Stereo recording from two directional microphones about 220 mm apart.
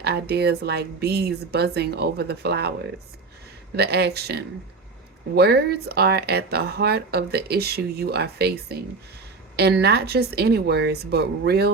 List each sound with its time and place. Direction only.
0.0 s speech: 50° right (ahead or behind)
3.8 s speech: 45° right (ahead or behind)